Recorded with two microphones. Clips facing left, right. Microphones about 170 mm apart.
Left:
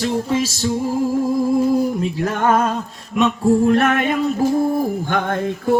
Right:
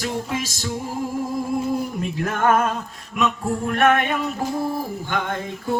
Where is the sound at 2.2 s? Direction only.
35° left (ahead or behind).